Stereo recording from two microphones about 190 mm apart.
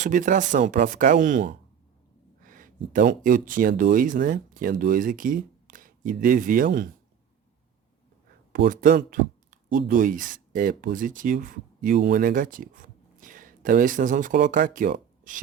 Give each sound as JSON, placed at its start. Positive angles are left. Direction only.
{"t": 0.0, "sound": "speech", "side_deg": -45}
{"t": 2.4, "sound": "a sound", "side_deg": -45}
{"t": 2.9, "sound": "speech", "side_deg": -45}
{"t": 8.5, "sound": "speech", "side_deg": -50}